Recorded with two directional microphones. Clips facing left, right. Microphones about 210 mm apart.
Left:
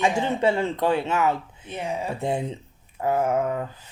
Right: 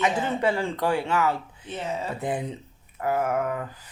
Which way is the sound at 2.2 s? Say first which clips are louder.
Left 2 dB; 25° left (ahead or behind).